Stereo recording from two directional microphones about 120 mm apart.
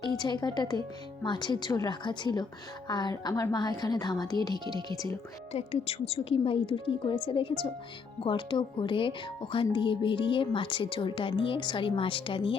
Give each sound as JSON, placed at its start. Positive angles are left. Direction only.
{"t": 0.0, "sound": "a woman's voice", "side_deg": 40}
{"t": 5.5, "sound": "speech", "side_deg": 55}